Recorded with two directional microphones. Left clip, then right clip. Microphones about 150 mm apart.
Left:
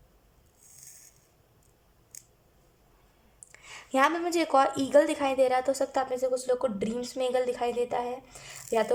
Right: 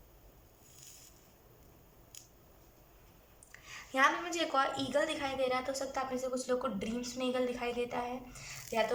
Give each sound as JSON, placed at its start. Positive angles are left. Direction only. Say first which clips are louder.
{"t": 3.5, "sound": "a woman's voice", "louder": "left 8 dB", "side_deg": 30}